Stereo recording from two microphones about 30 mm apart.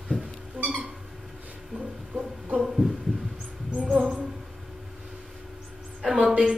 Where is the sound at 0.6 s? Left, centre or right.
Right.